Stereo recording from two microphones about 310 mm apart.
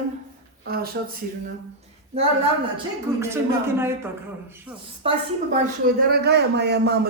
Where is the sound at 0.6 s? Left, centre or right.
Right.